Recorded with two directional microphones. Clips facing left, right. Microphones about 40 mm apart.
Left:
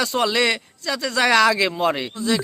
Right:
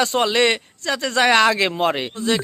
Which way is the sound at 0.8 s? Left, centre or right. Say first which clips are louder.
Right 2 dB; right.